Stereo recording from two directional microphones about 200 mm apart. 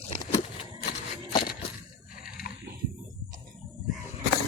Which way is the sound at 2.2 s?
45° left (ahead or behind).